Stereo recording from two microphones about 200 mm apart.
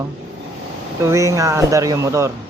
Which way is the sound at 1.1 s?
15° right (ahead or behind).